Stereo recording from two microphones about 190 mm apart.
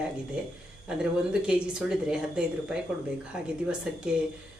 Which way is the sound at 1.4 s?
5° right (ahead or behind).